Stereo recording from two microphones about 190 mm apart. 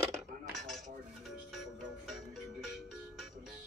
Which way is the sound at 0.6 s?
Centre (ahead or behind).